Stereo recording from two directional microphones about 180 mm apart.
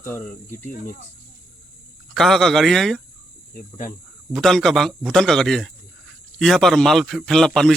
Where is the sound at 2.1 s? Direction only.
Centre (ahead or behind).